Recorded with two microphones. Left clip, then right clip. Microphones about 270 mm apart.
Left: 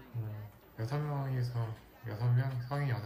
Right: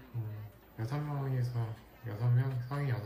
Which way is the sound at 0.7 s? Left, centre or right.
Centre.